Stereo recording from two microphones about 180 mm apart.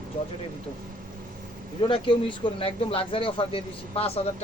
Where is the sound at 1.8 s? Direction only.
30° left (ahead or behind).